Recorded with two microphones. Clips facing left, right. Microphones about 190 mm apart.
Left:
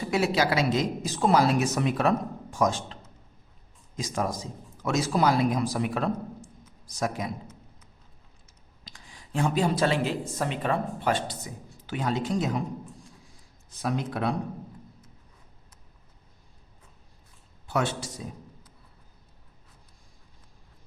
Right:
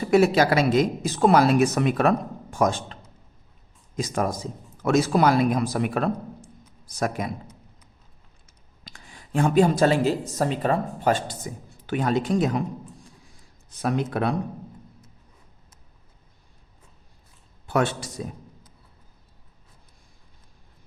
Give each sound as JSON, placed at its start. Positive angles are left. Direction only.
{"t": 0.1, "sound": "a woman's voice", "side_deg": -50}
{"t": 8.8, "sound": "speech", "side_deg": -55}
{"t": 13.8, "sound": "a woman's voice", "side_deg": -60}
{"t": 17.7, "sound": "speech", "side_deg": -60}